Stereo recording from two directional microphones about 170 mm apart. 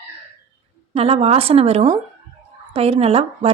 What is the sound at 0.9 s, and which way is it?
A woman's voice, 35° right (ahead or behind).